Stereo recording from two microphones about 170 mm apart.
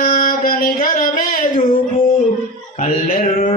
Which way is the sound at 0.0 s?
55° left (ahead or behind).